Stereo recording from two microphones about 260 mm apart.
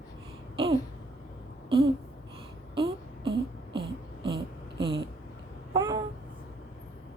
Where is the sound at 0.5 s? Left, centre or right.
Centre.